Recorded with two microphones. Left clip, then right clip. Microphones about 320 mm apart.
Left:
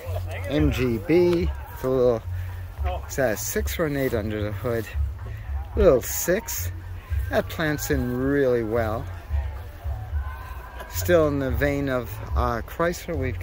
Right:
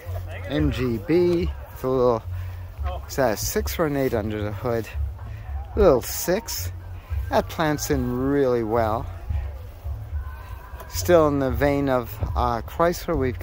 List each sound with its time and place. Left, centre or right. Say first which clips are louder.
0.6 s speech: left 1 dB; centre
3.2 s speech: right 2 dB; centre
11.1 s speech: right 3 dB; centre